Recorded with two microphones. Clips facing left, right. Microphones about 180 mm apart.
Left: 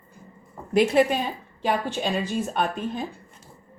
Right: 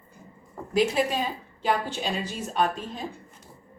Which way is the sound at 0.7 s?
60° left (ahead or behind).